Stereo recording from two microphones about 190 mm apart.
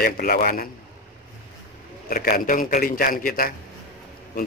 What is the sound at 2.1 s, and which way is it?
A man's voice, 50° left (ahead or behind).